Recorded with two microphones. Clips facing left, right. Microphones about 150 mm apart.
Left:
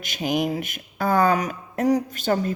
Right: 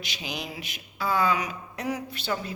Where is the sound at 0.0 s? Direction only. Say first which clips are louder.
Left 12 dB; 50° left (ahead or behind).